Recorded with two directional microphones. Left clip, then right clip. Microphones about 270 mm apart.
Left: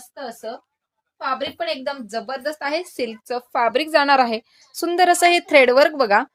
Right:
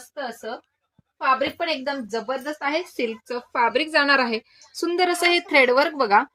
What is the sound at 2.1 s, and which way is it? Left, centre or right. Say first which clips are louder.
A woman's voice: left 1 dB; left.